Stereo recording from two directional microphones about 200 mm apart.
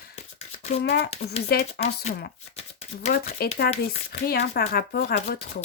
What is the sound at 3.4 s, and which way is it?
Speech, 50° left (ahead or behind).